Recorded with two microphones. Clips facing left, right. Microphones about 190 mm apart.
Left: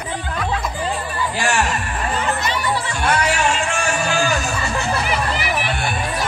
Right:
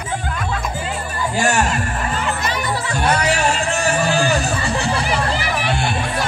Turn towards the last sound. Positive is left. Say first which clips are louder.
# right 3 dB
turn(degrees=-25)  # may be behind; listen again after turning